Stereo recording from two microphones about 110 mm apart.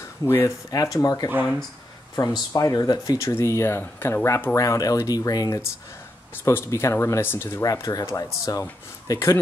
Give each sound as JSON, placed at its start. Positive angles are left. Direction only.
{"t": 0.2, "sound": "speech", "side_deg": 25}
{"t": 0.7, "sound": "speech", "side_deg": 35}
{"t": 6.3, "sound": "speech", "side_deg": 25}
{"t": 7.6, "sound": "speech", "side_deg": 35}